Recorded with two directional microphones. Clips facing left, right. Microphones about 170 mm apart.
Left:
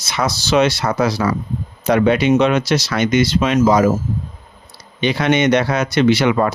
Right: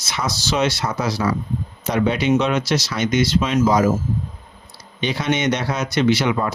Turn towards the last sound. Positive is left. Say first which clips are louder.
# left 4 dB
turn(degrees=65)  # may be behind; listen again after turning